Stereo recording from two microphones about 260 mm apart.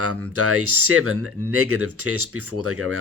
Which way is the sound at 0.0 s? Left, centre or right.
Right.